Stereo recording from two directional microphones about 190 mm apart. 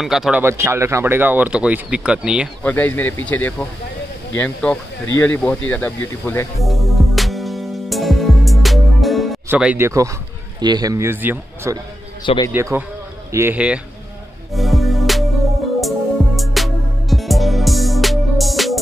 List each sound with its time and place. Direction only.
0.0 s speech: centre (ahead or behind)
0.4 s speech: 15° right (ahead or behind)
2.6 s speech: 10° left (ahead or behind)
6.6 s music: centre (ahead or behind)
9.5 s speech: 10° right (ahead or behind)
14.5 s music: centre (ahead or behind)